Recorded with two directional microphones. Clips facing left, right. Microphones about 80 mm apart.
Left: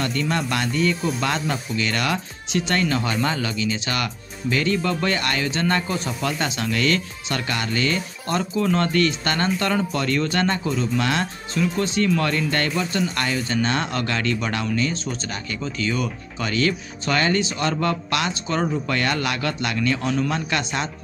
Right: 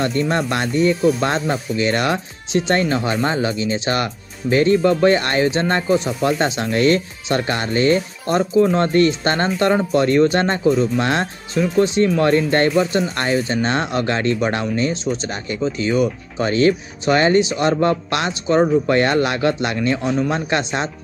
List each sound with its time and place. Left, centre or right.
0.0 s speech: right